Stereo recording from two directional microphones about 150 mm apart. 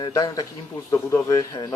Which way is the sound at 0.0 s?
25° left (ahead or behind).